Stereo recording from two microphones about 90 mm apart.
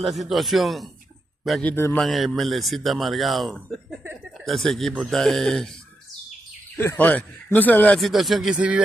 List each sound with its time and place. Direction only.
0.0 s a man's voice: centre (ahead or behind)
6.8 s speech: 25° left (ahead or behind)
8.0 s a man's voice: centre (ahead or behind)
8.5 s speech: 15° right (ahead or behind)